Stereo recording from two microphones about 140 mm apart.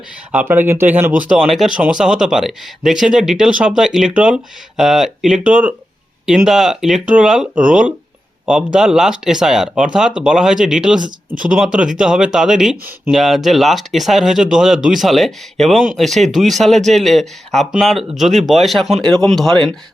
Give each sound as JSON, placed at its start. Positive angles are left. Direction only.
{"t": 0.3, "sound": "speech", "side_deg": -15}